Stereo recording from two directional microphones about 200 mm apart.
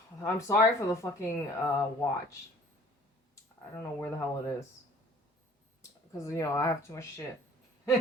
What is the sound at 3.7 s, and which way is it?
Speech, 10° left (ahead or behind).